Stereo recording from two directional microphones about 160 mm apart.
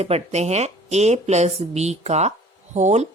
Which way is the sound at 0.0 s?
40° right (ahead or behind).